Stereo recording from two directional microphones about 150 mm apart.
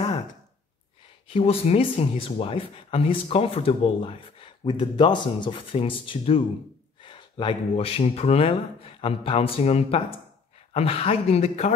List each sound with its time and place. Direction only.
1.3 s speech: 45° left (ahead or behind)